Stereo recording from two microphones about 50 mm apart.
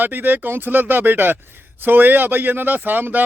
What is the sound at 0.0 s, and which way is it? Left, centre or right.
Speech, right.